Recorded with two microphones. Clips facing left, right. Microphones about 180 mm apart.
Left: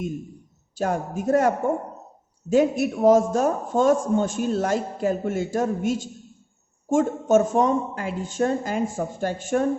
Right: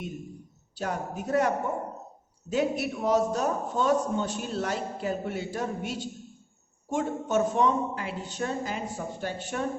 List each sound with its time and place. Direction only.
0.8 s a man's voice: 45° left (ahead or behind)